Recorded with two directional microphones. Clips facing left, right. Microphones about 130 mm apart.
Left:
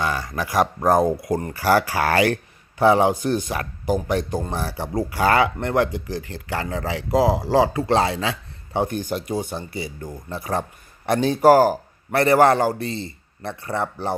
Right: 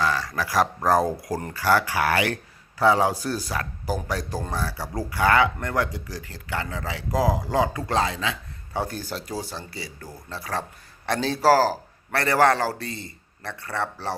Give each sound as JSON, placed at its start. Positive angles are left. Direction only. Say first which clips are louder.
{"t": 0.0, "sound": "a man's voice", "louder": "even", "side_deg": 25}
{"t": 2.0, "sound": "a man's voice", "louder": "left 4 dB", "side_deg": 40}
{"t": 8.7, "sound": "a man's voice", "louder": "left 6 dB", "side_deg": 20}